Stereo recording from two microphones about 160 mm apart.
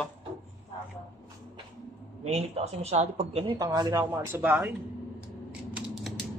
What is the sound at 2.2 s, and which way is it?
A woman's voice, 45° right (ahead or behind).